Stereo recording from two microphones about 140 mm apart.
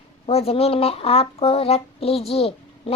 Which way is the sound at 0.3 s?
45° left (ahead or behind).